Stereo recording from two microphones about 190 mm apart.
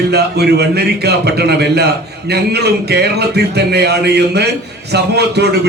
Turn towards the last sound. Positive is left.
turn(degrees=-60)  # may be behind; listen again after turning